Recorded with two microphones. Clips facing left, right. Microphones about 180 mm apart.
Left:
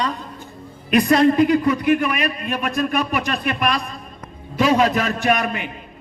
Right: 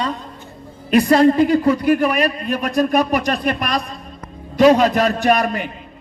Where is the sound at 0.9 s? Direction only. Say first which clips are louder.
Right 2 dB; 30° right (ahead or behind).